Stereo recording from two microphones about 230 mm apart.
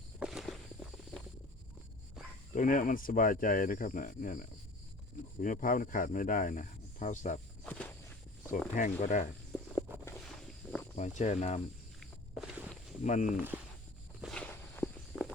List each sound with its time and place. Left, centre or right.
0.2 s walk: centre
2.5 s speech: left
7.6 s walk: centre
8.7 s speech: left
10.1 s a sound: centre
10.9 s speech: left
13.0 s speech: left
13.2 s speech: centre
14.2 s walk: centre